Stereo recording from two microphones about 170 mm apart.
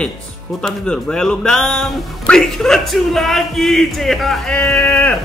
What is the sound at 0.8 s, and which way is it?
Speech, 5° left (ahead or behind).